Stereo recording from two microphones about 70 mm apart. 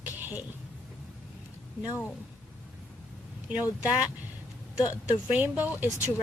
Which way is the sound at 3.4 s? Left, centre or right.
Right.